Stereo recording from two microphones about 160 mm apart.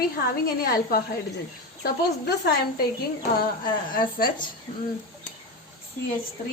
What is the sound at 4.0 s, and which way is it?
Speech, 60° left (ahead or behind).